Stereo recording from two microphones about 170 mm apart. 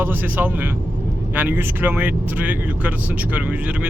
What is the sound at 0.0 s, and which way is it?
Speech, 10° right (ahead or behind).